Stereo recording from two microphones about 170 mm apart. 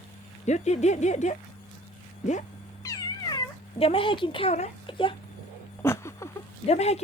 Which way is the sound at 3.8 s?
30° left (ahead or behind).